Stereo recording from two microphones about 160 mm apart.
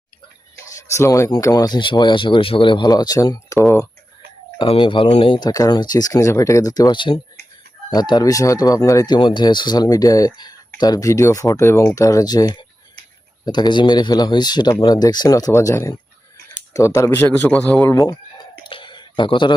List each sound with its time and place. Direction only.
0.7 s speech: 20° left (ahead or behind)
4.5 s a man's voice: 30° left (ahead or behind); by 17.8 s 5° left (ahead or behind)
17.8 s speech: 20° left (ahead or behind)
18.7 s a sound: 30° left (ahead or behind)